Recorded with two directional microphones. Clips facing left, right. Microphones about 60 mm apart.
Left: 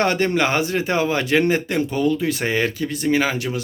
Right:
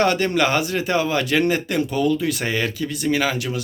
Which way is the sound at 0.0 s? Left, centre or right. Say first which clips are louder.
Even; left.